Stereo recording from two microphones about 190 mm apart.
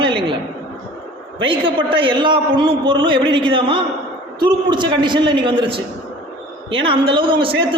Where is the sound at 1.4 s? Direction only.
25° right (ahead or behind).